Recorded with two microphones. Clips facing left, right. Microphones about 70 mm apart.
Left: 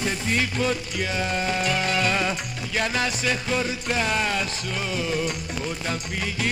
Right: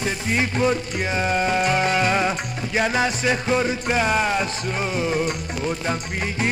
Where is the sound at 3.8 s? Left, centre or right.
Right.